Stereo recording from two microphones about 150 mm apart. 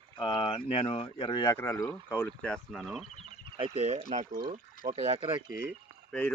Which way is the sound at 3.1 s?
35° right (ahead or behind).